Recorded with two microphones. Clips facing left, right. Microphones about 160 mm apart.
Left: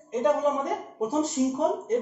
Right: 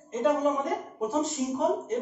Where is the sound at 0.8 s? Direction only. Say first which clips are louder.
Left 2 dB; 40° left (ahead or behind).